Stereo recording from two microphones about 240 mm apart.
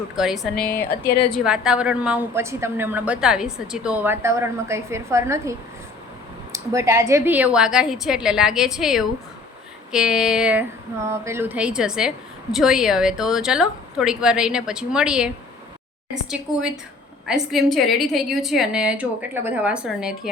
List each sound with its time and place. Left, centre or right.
0.2 s a woman's voice: centre
0.5 s speech: left
1.3 s a woman's voice: centre
16.3 s a woman's voice: centre